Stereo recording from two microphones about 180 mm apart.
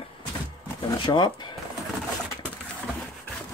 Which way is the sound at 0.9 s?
25° left (ahead or behind).